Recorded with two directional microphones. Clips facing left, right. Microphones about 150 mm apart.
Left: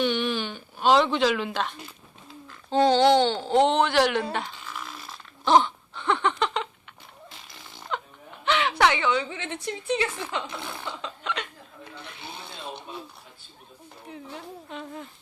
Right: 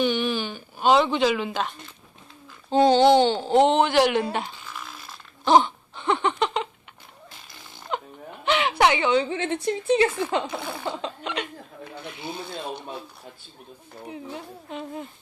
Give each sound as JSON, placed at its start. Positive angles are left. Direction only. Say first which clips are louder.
{"t": 0.0, "sound": "a child's voice", "louder": "right 2 dB", "side_deg": 0}
{"t": 4.6, "sound": "a sound", "louder": "left 1 dB", "side_deg": 0}
{"t": 8.4, "sound": "a sound", "louder": "right 2 dB", "side_deg": -10}
{"t": 9.1, "sound": "a woman's voice", "louder": "right 7 dB", "side_deg": -30}
{"t": 10.4, "sound": "a child's voice", "louder": "right 5 dB", "side_deg": -5}
{"t": 10.8, "sound": "a woman's voice", "louder": "right 6 dB", "side_deg": -30}
{"t": 11.2, "sound": "speech", "louder": "right 2 dB", "side_deg": -20}
{"t": 14.1, "sound": "speech", "louder": "right 3 dB", "side_deg": -10}